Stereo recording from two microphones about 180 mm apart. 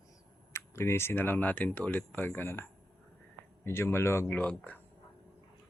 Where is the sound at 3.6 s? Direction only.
15° left (ahead or behind).